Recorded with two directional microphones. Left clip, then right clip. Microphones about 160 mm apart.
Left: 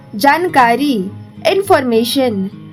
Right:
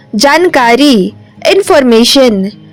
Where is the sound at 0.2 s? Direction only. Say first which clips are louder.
Right 4 dB; 55° right (ahead or behind).